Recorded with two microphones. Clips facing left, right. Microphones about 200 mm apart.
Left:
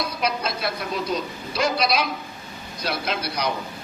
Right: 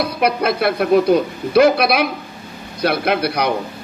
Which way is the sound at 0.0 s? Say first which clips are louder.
Right 8 dB; 60° right (ahead or behind).